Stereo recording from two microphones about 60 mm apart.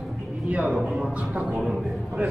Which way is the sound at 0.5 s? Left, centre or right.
Right.